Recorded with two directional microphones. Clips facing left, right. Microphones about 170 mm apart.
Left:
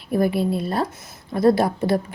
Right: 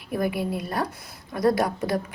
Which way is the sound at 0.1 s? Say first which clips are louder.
Left 6 dB; 30° left (ahead or behind).